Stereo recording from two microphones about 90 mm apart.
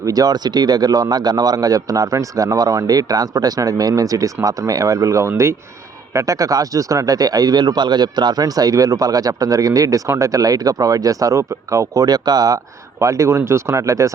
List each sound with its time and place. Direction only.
0.0 s speech: 40° right (ahead or behind)
13.0 s speech: 35° right (ahead or behind)